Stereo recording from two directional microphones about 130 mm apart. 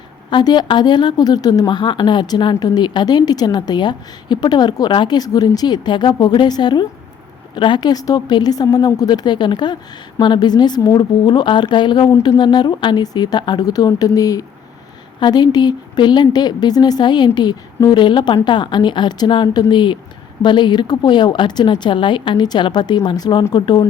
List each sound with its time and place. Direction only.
0.3 s speech: 35° left (ahead or behind)